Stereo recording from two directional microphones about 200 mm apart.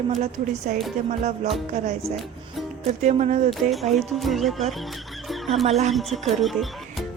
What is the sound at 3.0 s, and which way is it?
Speech, 35° right (ahead or behind).